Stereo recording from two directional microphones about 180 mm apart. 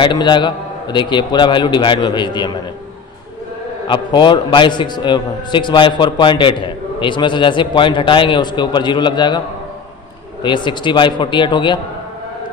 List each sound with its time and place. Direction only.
0.0 s a man's voice: 25° left (ahead or behind)
3.8 s a man's voice: 25° left (ahead or behind)
10.4 s a man's voice: 25° left (ahead or behind)